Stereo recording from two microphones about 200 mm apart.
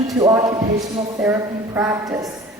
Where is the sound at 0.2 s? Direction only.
15° right (ahead or behind).